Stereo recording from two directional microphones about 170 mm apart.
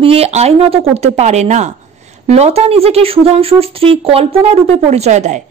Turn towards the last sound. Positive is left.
turn(degrees=-45)  # may be behind; listen again after turning